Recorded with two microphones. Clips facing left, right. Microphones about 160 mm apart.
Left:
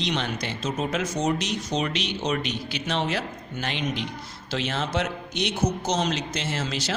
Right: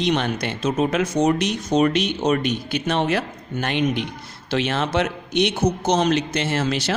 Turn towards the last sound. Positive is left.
turn(degrees=-65)  # may be behind; listen again after turning